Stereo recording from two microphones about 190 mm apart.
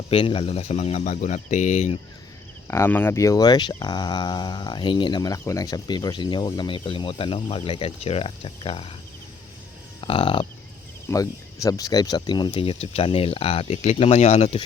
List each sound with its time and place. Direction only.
0.1 s speech: 30° left (ahead or behind)
2.6 s speech: 15° left (ahead or behind); by 8.9 s 30° left (ahead or behind)
10.0 s speech: 30° left (ahead or behind)
11.1 s speech: 15° left (ahead or behind); by 14.6 s 35° left (ahead or behind)